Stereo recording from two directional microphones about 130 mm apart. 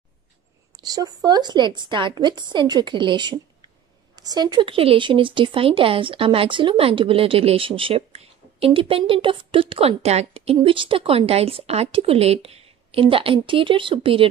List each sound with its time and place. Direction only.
0.7 s speech: 30° right (ahead or behind)